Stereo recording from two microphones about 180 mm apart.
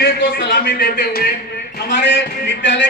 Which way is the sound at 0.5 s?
55° left (ahead or behind).